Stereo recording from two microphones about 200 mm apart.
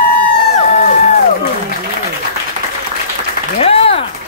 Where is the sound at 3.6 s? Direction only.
30° left (ahead or behind).